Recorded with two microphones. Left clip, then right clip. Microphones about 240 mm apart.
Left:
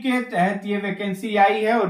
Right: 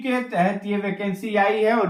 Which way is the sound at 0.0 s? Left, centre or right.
Centre.